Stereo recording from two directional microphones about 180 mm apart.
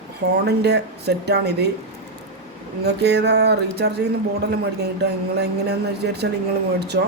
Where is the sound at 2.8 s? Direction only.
65° right (ahead or behind).